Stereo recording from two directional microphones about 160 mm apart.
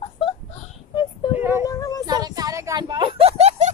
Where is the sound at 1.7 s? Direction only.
20° left (ahead or behind).